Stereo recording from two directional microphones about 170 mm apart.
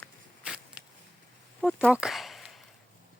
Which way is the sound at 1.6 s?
5° left (ahead or behind).